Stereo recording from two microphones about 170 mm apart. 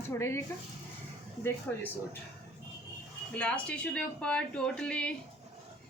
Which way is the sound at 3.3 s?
5° left (ahead or behind).